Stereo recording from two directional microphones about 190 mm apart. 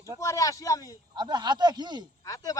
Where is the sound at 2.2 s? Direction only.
20° left (ahead or behind).